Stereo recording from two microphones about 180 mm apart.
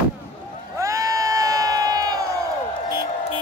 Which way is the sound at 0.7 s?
15° right (ahead or behind).